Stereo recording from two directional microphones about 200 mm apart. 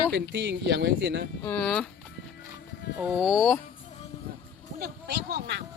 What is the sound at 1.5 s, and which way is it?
Speech, 5° left (ahead or behind).